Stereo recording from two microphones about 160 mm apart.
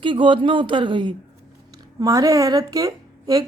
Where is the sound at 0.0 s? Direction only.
30° right (ahead or behind).